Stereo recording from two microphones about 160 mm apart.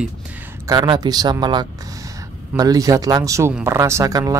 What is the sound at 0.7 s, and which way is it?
Speech, 30° right (ahead or behind).